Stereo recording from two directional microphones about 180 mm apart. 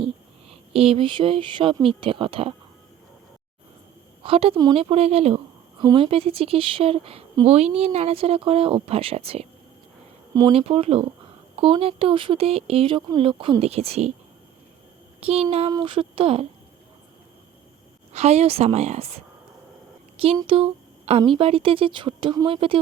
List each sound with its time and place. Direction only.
0.0 s a sound: 35° right (ahead or behind)
2.0 s speech: 30° right (ahead or behind)
4.2 s speech: 30° right (ahead or behind)
15.2 s speech: 35° right (ahead or behind)
18.1 s speech: 35° right (ahead or behind)
20.2 s speech: 30° right (ahead or behind)